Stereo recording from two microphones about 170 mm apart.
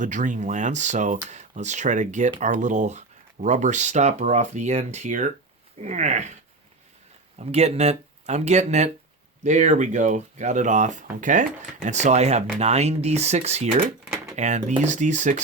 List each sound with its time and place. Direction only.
0.0 s speech: 45° right (ahead or behind)
7.3 s speech: 40° right (ahead or behind)